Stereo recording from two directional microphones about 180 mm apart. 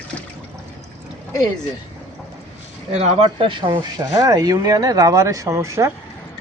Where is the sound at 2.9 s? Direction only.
30° right (ahead or behind); by 5.9 s 15° right (ahead or behind).